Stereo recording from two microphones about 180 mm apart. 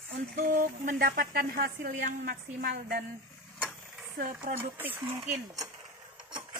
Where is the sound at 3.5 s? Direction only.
5° left (ahead or behind).